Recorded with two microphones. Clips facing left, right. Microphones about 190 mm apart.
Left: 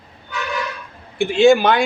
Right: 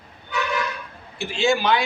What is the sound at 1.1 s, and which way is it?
Speech, 55° left (ahead or behind).